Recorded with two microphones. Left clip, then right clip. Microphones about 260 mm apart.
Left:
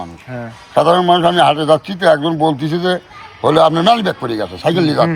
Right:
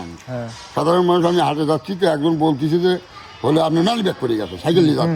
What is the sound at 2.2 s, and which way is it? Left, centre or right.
Speech, left.